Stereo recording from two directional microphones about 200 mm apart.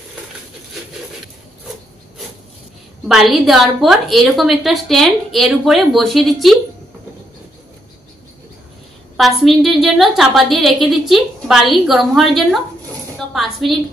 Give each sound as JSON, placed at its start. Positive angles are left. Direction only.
{"t": 3.1, "sound": "a woman's voice", "side_deg": 0}
{"t": 9.1, "sound": "a woman's voice", "side_deg": 0}